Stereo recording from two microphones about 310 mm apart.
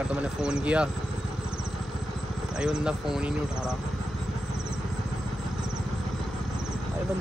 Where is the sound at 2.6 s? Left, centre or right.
Centre.